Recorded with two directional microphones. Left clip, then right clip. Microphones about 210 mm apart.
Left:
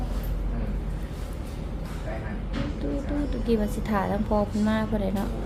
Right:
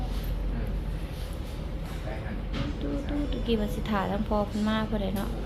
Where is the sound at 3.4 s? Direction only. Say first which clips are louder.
Left 4 dB; 15° left (ahead or behind).